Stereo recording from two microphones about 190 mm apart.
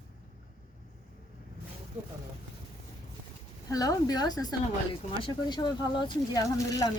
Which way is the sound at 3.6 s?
20° left (ahead or behind).